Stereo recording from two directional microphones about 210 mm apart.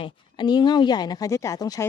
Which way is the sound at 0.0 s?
20° left (ahead or behind).